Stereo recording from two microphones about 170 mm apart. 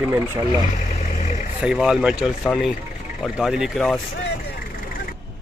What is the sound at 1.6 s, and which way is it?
Speech, 5° right (ahead or behind).